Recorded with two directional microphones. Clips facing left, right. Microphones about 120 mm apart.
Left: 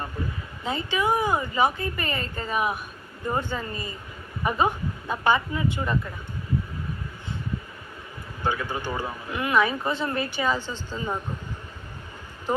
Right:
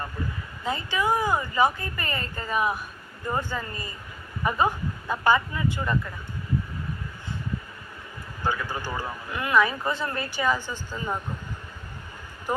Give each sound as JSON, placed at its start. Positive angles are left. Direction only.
{"t": 0.6, "sound": "speech", "side_deg": 25}
{"t": 8.4, "sound": "speech", "side_deg": 20}